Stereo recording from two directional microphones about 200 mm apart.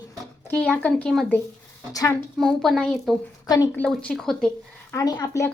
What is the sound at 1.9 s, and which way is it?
Speech, 20° left (ahead or behind).